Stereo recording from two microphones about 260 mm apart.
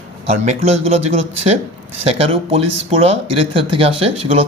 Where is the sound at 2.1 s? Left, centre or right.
Right.